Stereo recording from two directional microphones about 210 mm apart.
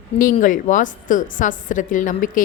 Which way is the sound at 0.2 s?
40° left (ahead or behind).